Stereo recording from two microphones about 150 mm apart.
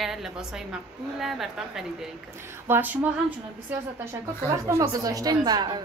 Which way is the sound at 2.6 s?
15° right (ahead or behind).